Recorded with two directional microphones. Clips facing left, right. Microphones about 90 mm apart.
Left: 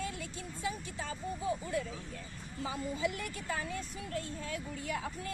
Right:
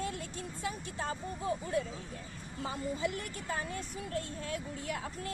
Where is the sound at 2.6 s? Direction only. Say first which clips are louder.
Even; 45° right (ahead or behind).